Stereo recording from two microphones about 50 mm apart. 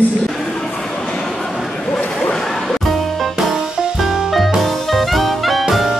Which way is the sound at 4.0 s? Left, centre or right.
Centre.